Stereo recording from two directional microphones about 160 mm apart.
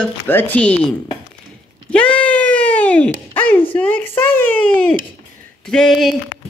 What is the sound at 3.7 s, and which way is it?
A child's voice, 10° left (ahead or behind).